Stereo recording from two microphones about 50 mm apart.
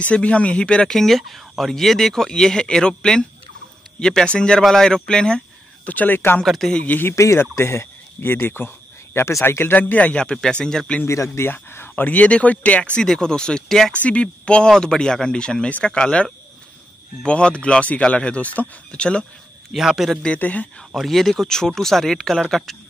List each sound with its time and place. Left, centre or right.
0.0 s speech: left
0.9 s speech: centre
5.9 s speech: left
6.4 s speech: centre
6.9 s speech: left
7.3 s speech: left
9.8 s speech: left
10.3 s speech: centre
11.5 s speech: left
11.9 s speech: left
13.0 s speech: centre
19.7 s a man's voice: centre
20.3 s speech: left
20.9 s speech: centre